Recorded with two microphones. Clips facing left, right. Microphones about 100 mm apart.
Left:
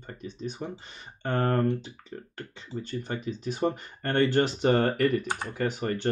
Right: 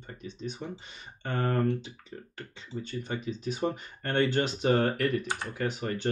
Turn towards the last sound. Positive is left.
turn(degrees=40)  # may be behind; listen again after turning